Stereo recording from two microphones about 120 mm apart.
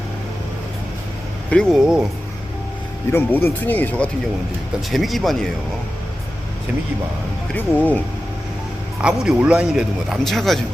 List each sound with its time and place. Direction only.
1.5 s speech: 10° left (ahead or behind)
3.1 s speech: 20° left (ahead or behind)
4.9 s speech: centre (ahead or behind)
7.5 s speech: 15° left (ahead or behind)
9.0 s speech: 10° right (ahead or behind)